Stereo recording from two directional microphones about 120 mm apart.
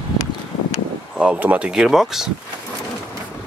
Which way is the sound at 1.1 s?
10° right (ahead or behind).